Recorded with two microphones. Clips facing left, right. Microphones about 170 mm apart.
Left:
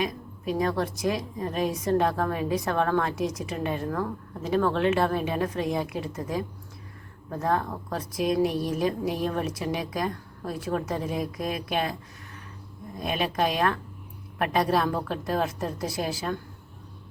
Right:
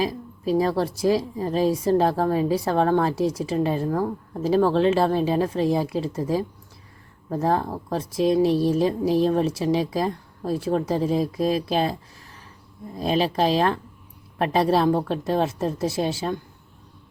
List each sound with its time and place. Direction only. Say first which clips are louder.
0.0 s a woman's voice: right 4 dB; 30° right (ahead or behind)
13.0 s a woman's voice: right 5 dB; 30° right (ahead or behind)